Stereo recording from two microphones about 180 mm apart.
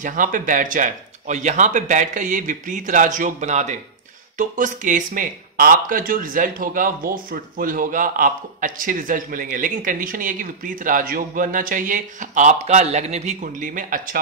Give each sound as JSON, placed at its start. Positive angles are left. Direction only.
{"t": 0.0, "sound": "speech", "side_deg": -45}